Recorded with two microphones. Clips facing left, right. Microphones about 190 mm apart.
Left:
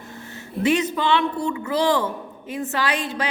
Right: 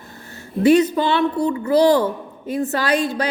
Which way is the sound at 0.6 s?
35° right (ahead or behind).